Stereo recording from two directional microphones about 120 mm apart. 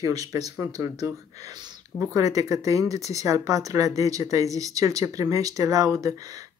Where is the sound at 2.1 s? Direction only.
30° right (ahead or behind).